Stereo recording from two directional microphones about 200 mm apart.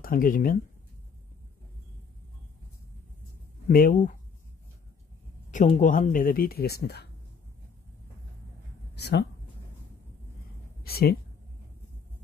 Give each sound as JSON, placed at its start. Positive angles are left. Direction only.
{"t": 0.0, "sound": "speech", "side_deg": 45}
{"t": 3.6, "sound": "speech", "side_deg": 45}
{"t": 5.5, "sound": "speech", "side_deg": 40}
{"t": 8.9, "sound": "speech", "side_deg": 55}
{"t": 10.8, "sound": "a woman's voice", "side_deg": 50}